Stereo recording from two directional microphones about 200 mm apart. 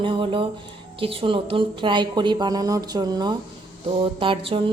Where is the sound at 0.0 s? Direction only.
25° right (ahead or behind).